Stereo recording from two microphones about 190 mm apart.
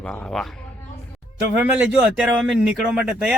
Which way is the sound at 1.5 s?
10° right (ahead or behind).